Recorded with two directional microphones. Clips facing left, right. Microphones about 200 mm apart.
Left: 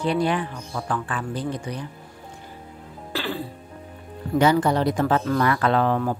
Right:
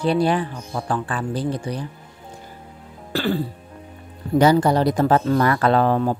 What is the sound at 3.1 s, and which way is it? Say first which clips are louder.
Music: right 7 dB; 45° right (ahead or behind).